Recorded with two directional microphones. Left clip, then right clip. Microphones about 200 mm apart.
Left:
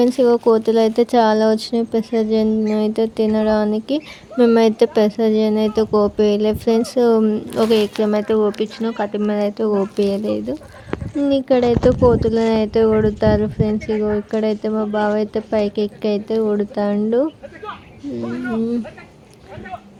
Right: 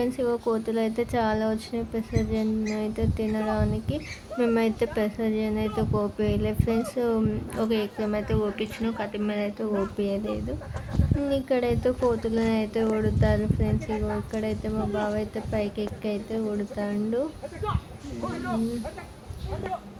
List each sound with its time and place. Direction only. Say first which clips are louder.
0.0 s speech: left 12 dB; 35° left (ahead or behind)